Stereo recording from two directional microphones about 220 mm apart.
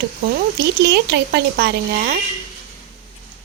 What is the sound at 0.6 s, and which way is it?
Speech, 50° right (ahead or behind).